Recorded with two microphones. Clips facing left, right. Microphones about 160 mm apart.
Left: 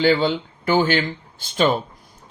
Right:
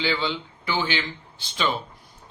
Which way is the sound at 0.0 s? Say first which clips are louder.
Left 9 dB; 50° left (ahead or behind).